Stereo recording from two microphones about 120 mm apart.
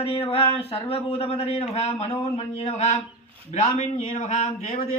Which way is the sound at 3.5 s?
85° left.